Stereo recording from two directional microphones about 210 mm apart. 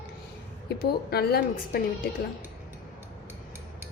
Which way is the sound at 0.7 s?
50° left (ahead or behind).